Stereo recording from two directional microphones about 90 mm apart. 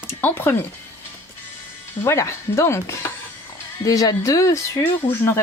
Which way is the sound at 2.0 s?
35° left (ahead or behind).